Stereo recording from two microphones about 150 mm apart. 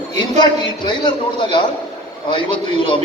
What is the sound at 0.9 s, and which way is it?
Speech, 30° left (ahead or behind).